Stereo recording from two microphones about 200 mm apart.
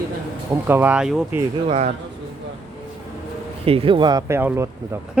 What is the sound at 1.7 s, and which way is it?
Speech, 35° right (ahead or behind).